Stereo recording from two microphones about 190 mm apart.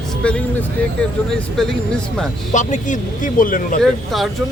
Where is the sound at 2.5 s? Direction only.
40° left (ahead or behind).